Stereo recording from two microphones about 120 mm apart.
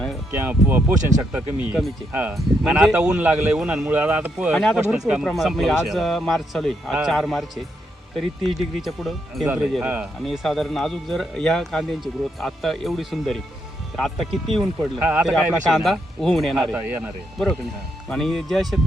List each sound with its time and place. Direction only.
0.3 s speech: 15° right (ahead or behind)
4.5 s speech: 5° left (ahead or behind)